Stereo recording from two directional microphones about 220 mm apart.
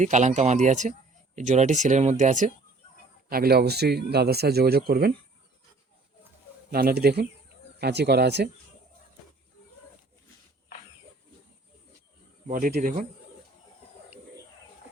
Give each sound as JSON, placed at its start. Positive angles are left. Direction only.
{"t": 0.0, "sound": "speech", "side_deg": -30}
{"t": 6.7, "sound": "speech", "side_deg": -45}
{"t": 12.5, "sound": "speech", "side_deg": -35}